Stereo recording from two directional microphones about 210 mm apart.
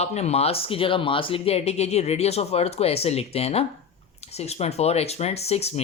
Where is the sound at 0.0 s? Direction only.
30° left (ahead or behind).